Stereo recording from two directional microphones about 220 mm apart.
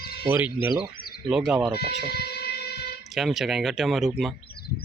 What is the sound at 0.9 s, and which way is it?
Bird, 40° left (ahead or behind).